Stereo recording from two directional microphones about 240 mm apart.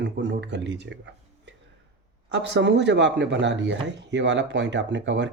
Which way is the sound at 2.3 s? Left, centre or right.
Right.